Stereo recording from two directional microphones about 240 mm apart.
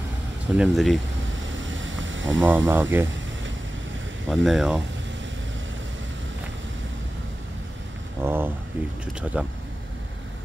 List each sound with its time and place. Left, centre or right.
0.6 s speech: centre
1.5 s a sound: right
2.4 s speech: centre
4.3 s speech: centre
8.2 s speech: centre